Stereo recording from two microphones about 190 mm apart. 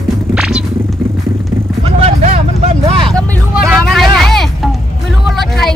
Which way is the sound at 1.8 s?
35° right (ahead or behind).